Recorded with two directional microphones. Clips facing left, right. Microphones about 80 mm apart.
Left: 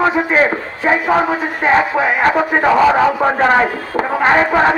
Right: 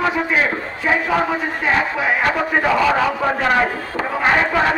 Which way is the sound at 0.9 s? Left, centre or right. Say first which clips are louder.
Left 4 dB; left.